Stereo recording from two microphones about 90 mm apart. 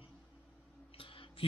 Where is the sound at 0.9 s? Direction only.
90° left.